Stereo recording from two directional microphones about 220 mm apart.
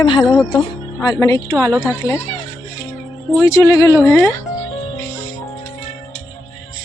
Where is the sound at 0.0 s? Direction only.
25° left (ahead or behind).